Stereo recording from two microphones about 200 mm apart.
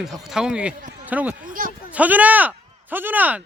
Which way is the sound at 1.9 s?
5° right (ahead or behind).